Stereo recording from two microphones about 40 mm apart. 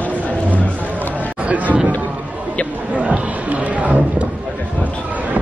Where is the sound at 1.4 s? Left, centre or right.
Right.